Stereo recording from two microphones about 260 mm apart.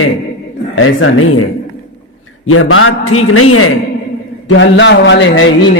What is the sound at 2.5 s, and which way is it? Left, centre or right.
Speech, left.